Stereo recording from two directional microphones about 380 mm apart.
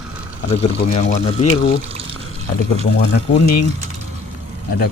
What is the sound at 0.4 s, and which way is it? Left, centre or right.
Speech, centre.